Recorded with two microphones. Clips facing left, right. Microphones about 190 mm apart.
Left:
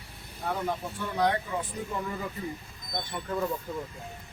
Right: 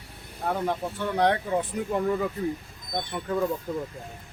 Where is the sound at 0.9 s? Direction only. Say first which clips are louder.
Right 4 dB; 65° right (ahead or behind).